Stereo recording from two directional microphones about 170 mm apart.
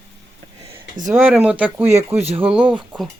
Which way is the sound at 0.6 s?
35° right (ahead or behind).